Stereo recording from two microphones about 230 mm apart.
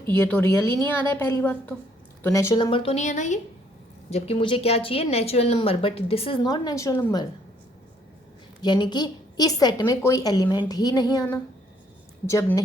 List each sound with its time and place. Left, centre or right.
0.1 s a woman's voice: centre
8.6 s a woman's voice: centre